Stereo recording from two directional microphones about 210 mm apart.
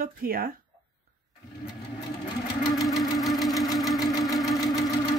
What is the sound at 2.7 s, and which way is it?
Sewing machine, centre (ahead or behind).